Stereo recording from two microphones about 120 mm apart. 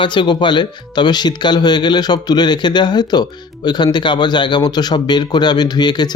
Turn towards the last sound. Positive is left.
turn(degrees=35)  # may be behind; listen again after turning